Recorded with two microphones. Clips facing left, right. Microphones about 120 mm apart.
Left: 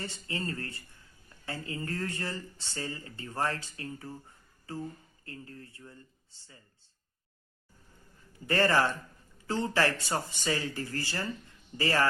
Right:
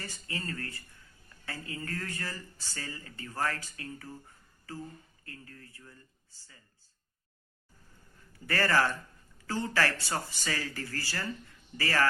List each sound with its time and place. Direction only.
0.0 s speech: 25° left (ahead or behind)
5.2 s speech: 25° left (ahead or behind)
8.4 s speech: 20° left (ahead or behind)